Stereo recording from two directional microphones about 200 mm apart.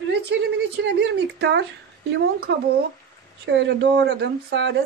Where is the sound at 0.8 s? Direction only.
60° right (ahead or behind).